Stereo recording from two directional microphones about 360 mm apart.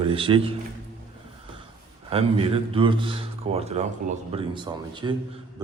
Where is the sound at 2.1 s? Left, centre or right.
Centre.